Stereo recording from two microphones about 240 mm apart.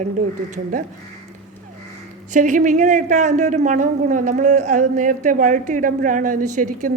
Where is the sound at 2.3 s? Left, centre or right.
Right.